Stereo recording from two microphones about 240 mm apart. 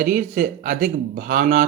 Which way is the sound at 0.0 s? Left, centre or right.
Right.